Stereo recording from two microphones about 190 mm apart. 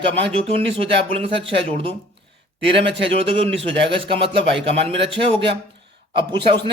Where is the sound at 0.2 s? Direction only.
30° right (ahead or behind).